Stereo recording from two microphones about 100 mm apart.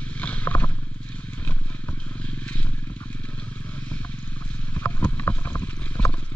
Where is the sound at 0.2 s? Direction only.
15° left (ahead or behind).